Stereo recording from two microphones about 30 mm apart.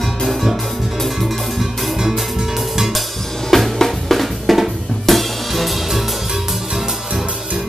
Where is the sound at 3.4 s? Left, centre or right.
Centre.